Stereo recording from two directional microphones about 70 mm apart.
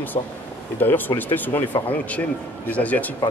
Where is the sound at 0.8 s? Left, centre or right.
Left.